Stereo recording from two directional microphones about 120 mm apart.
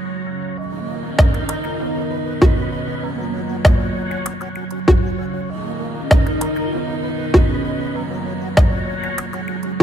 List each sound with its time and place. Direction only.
1.2 s music: centre (ahead or behind)
2.4 s music: centre (ahead or behind)
3.6 s music: centre (ahead or behind)
4.9 s music: centre (ahead or behind)
6.1 s music: centre (ahead or behind)
7.3 s music: centre (ahead or behind)
8.6 s music: centre (ahead or behind)